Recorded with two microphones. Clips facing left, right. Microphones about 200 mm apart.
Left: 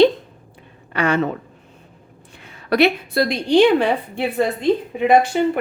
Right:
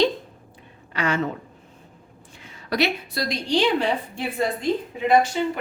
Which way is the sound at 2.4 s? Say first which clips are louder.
Left 7 dB; 60° left (ahead or behind).